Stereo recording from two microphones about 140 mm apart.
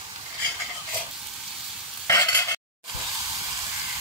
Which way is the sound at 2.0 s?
25° left (ahead or behind).